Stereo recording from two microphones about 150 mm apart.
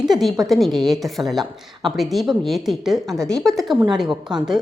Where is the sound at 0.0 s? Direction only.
Centre (ahead or behind).